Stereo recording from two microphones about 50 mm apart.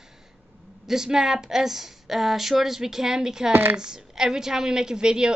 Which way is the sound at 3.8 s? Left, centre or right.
Centre.